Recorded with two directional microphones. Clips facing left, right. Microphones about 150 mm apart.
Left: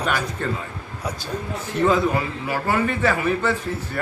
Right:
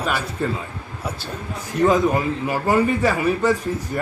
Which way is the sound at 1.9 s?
15° right (ahead or behind).